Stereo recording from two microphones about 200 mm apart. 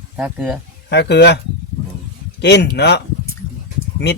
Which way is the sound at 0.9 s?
55° left (ahead or behind).